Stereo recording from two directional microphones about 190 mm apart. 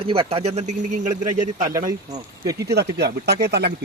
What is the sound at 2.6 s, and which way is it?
Speech, 60° right (ahead or behind).